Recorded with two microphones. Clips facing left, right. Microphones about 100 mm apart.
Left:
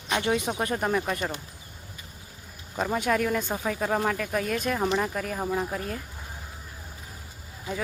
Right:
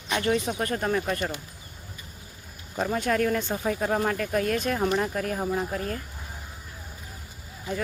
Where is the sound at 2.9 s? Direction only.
10° left (ahead or behind).